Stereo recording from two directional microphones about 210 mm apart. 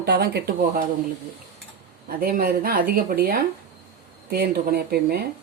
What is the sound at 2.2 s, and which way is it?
Speech, 45° right (ahead or behind).